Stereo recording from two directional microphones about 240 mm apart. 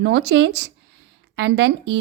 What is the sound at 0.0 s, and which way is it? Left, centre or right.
Speech, right.